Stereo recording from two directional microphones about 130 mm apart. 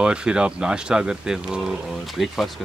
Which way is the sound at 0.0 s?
5° right (ahead or behind).